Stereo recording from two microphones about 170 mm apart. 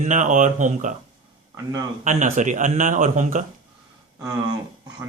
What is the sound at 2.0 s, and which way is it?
A man's voice, 45° right (ahead or behind).